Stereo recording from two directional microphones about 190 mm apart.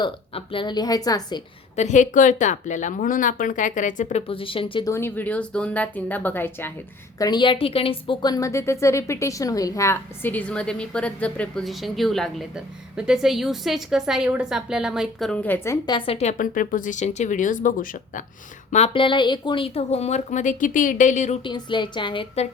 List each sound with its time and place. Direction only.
0.0 s a woman's voice: 25° left (ahead or behind)
1.7 s speech: 40° left (ahead or behind)
4.9 s a woman's voice: 15° left (ahead or behind)
7.2 s a woman's voice: 20° left (ahead or behind)
16.0 s speech: 30° left (ahead or behind)
18.7 s speech: 30° left (ahead or behind)
21.4 s a woman's voice: 25° left (ahead or behind)